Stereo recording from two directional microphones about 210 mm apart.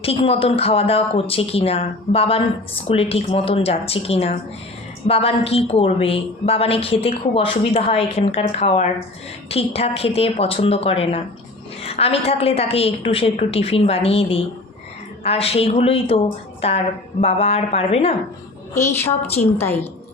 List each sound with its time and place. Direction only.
0.0 s a woman's voice: 25° left (ahead or behind)
18.7 s a woman's voice: 10° left (ahead or behind)
19.4 s a woman's voice: 40° left (ahead or behind)